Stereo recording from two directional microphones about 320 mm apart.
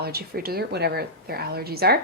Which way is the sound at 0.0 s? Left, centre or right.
Right.